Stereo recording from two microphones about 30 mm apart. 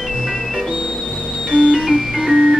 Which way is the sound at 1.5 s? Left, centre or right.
Right.